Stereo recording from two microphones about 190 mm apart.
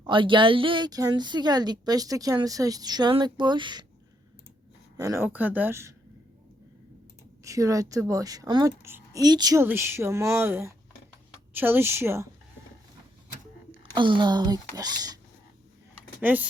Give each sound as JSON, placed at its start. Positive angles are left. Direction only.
{"t": 0.0, "sound": "a woman's voice", "side_deg": -25}
{"t": 4.9, "sound": "a woman's voice", "side_deg": -15}
{"t": 7.4, "sound": "a woman's voice", "side_deg": -15}
{"t": 13.9, "sound": "a woman's voice", "side_deg": -25}
{"t": 16.2, "sound": "a woman's voice", "side_deg": -10}